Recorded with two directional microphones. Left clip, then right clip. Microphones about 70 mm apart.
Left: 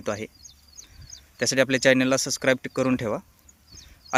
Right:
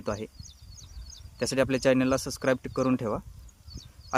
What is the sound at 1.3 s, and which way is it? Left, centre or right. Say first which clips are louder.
Speech: left 4 dB; centre.